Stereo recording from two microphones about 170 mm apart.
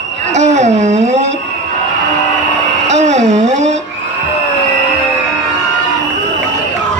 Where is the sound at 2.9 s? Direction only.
45° right (ahead or behind).